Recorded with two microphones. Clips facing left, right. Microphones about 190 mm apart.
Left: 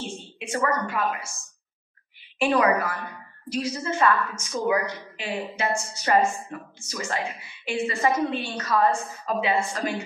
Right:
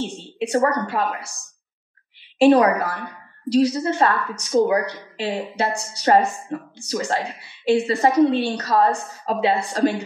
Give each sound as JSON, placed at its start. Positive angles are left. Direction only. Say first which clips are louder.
{"t": 0.4, "sound": "a woman's voice", "louder": "right 6 dB", "side_deg": -35}
{"t": 2.3, "sound": "a woman's voice", "louder": "right 7 dB", "side_deg": -35}